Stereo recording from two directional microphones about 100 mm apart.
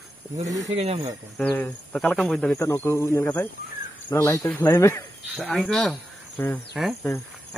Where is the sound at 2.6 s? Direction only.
25° left (ahead or behind).